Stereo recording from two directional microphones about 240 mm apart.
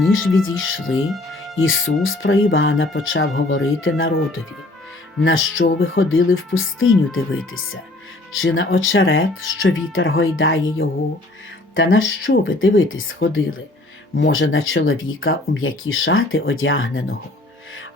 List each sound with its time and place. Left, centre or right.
0.4 s speech: left